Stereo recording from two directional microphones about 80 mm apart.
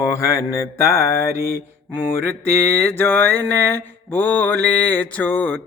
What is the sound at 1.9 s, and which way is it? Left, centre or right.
Mantra, left.